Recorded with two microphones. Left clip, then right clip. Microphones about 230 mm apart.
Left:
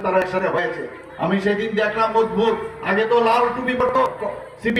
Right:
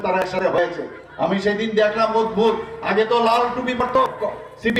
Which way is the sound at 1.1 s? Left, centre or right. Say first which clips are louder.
Even; right.